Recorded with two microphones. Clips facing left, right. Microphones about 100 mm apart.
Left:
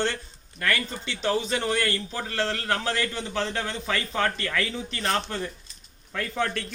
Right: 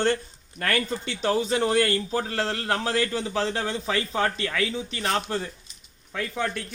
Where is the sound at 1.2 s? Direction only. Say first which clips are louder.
Right 2 dB; 30° right (ahead or behind).